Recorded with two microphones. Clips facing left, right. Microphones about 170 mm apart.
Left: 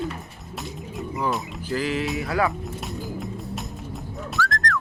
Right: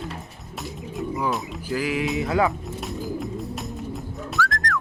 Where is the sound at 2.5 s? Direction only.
Centre (ahead or behind).